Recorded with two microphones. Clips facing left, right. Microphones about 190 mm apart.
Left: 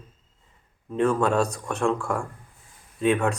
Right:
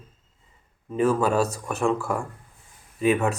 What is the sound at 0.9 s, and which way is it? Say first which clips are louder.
A man's voice: even; 5° right (ahead or behind).